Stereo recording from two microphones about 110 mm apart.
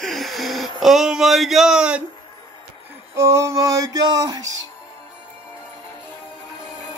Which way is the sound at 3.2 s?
25° right (ahead or behind).